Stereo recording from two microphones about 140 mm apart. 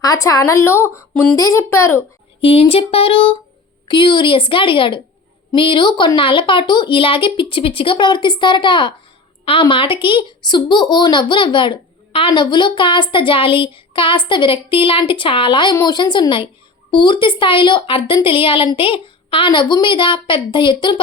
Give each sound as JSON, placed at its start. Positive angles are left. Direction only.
{"t": 0.0, "sound": "a woman's voice", "side_deg": 25}
{"t": 1.4, "sound": "a woman's voice", "side_deg": 20}
{"t": 2.4, "sound": "a sound", "side_deg": 45}
{"t": 3.8, "sound": "speech", "side_deg": 35}